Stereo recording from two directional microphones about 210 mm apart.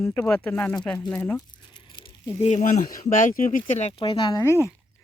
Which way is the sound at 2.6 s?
35° left (ahead or behind).